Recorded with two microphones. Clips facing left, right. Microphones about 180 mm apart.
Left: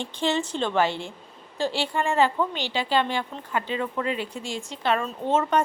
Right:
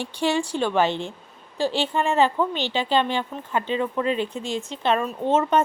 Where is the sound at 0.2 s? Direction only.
15° right (ahead or behind).